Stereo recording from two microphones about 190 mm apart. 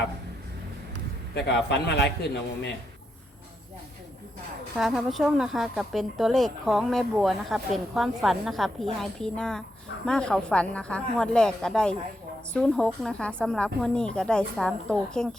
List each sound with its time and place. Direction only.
1.4 s a man's voice: 60° left (ahead or behind)
4.8 s speech: centre (ahead or behind)